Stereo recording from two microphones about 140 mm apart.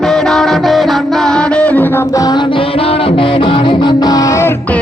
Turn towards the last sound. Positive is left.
turn(degrees=20)  # may be behind; listen again after turning